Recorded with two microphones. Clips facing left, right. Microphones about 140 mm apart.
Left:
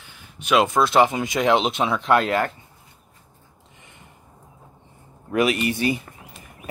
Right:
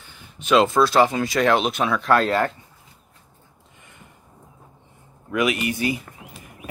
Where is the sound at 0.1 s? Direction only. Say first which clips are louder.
Right 2 dB; 10° left (ahead or behind).